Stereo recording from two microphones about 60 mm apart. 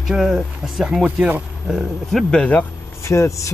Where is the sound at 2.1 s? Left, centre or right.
Centre.